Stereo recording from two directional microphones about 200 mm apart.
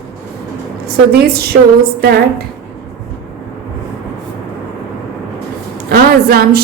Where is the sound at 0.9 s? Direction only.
50° right (ahead or behind).